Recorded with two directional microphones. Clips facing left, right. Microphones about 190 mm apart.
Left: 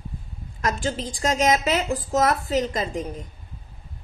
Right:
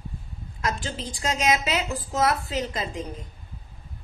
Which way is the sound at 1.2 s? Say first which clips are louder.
Left 3 dB; 50° left (ahead or behind).